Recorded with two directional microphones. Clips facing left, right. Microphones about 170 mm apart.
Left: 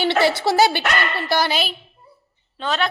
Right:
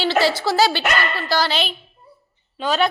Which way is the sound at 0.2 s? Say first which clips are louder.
Right 1 dB; 55° left (ahead or behind).